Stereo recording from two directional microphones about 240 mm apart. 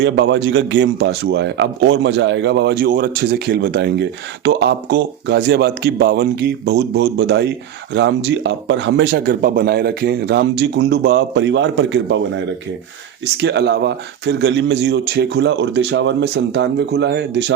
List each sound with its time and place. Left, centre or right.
0.0 s a man's voice: right